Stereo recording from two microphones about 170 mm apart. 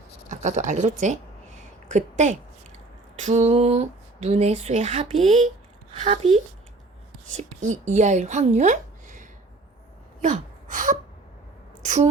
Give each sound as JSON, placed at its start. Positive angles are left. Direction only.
{"t": 0.3, "sound": "a sound", "side_deg": -45}
{"t": 3.2, "sound": "speech", "side_deg": -45}
{"t": 5.1, "sound": "speech", "side_deg": 0}
{"t": 5.9, "sound": "a woman's voice", "side_deg": -35}
{"t": 10.2, "sound": "gasp", "side_deg": -45}